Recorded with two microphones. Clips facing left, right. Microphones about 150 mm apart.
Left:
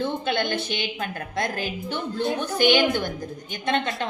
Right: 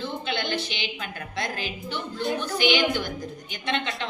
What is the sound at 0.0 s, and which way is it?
A woman's voice, 50° left (ahead or behind).